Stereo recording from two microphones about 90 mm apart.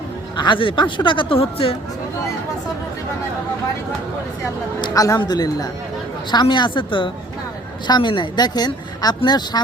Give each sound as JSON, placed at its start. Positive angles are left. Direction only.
{"t": 0.3, "sound": "speech", "side_deg": 65}
{"t": 4.9, "sound": "speech", "side_deg": 40}
{"t": 6.3, "sound": "a woman's voice", "side_deg": 55}